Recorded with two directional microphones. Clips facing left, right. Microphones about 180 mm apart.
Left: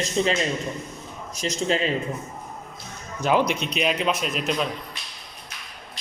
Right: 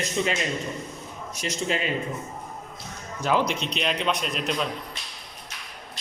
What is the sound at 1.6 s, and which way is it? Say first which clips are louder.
Speech: left 4 dB; 40° left (ahead or behind).